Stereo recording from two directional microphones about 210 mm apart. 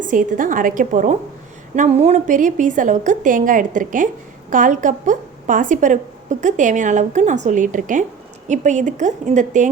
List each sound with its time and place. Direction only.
0.0 s a woman's voice: 40° right (ahead or behind)